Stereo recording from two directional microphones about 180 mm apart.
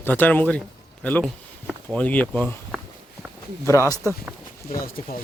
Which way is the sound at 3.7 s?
15° left (ahead or behind).